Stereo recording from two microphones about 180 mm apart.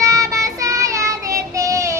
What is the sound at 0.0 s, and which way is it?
Child singing, 20° right (ahead or behind).